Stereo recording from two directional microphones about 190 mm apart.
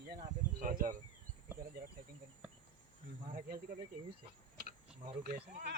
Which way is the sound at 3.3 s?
50° right (ahead or behind).